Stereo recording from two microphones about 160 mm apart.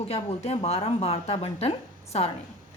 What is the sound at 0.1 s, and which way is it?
A woman's voice, 40° left (ahead or behind).